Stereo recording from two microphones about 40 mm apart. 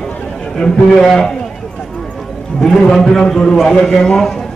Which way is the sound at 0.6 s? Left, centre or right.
Centre.